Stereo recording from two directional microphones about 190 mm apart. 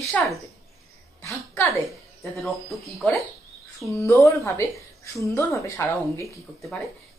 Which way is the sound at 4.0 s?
15° left (ahead or behind).